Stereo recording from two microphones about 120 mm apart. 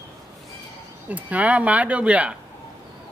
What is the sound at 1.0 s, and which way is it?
Speech, 10° right (ahead or behind).